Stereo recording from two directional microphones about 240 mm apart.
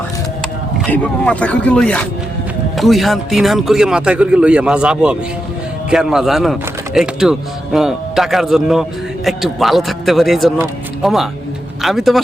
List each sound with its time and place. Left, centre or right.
0.8 s speech: centre